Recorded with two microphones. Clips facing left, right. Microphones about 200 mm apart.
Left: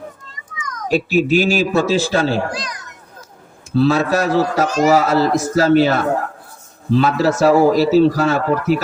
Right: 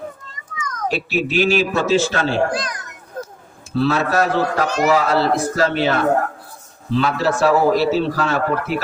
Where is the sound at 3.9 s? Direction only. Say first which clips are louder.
Left 2 dB; 40° left (ahead or behind).